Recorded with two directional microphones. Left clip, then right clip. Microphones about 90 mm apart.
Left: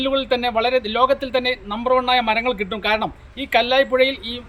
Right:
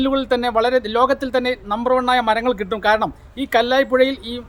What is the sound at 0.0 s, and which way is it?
A man's voice, 20° right (ahead or behind).